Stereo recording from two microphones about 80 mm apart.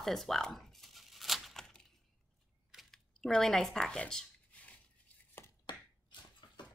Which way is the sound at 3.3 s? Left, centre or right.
Centre.